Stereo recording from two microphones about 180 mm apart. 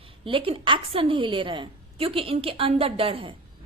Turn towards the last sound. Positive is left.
turn(degrees=-30)  # may be behind; listen again after turning